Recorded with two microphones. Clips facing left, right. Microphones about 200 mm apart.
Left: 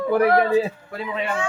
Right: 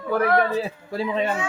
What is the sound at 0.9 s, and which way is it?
Speech, 30° right (ahead or behind).